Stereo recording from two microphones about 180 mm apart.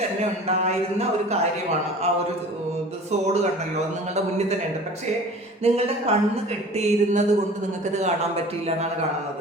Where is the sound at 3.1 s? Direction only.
40° right (ahead or behind).